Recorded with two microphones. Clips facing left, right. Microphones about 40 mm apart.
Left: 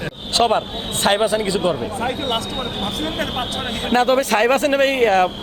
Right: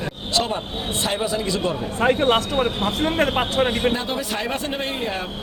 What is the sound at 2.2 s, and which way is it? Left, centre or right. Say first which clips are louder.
Speech: right 4 dB; right.